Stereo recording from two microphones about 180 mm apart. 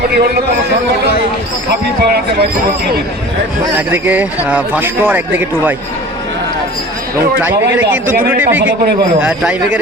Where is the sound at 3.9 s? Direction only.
10° right (ahead or behind).